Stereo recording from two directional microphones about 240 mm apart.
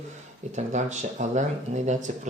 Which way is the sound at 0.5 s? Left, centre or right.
Right.